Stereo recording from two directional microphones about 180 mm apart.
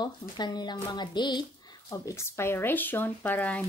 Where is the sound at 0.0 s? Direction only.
25° left (ahead or behind).